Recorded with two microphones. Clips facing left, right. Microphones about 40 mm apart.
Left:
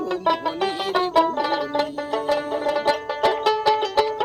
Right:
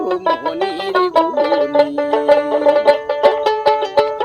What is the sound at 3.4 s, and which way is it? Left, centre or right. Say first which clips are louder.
Music: right 5 dB; centre.